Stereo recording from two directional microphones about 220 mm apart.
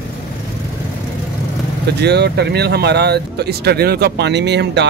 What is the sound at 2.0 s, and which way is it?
Speech, 50° right (ahead or behind).